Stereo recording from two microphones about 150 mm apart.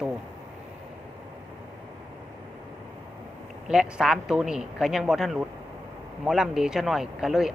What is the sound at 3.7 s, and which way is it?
Speech, 5° right (ahead or behind).